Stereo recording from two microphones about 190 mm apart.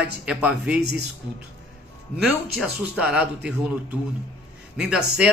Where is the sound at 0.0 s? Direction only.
5° right (ahead or behind).